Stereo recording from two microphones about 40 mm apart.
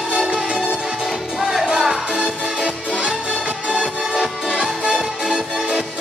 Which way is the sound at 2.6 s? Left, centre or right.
Right.